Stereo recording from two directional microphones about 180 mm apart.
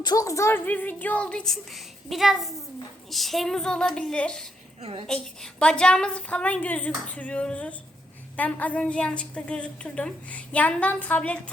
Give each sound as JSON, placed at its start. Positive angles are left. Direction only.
{"t": 0.0, "sound": "a woman's voice", "side_deg": 20}
{"t": 4.8, "sound": "a woman's voice", "side_deg": -35}
{"t": 5.0, "sound": "a woman's voice", "side_deg": 5}